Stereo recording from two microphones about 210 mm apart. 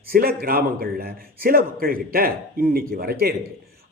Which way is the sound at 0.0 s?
45° right (ahead or behind).